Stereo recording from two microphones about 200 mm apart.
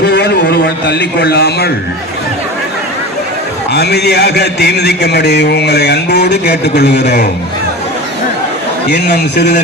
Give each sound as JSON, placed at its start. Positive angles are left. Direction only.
{"t": 0.0, "sound": "a sound", "side_deg": 55}
{"t": 3.7, "sound": "a man's voice", "side_deg": 55}
{"t": 9.1, "sound": "a man's voice", "side_deg": 55}